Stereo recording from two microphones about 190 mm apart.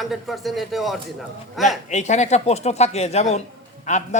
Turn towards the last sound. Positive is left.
turn(degrees=40)  # may be behind; listen again after turning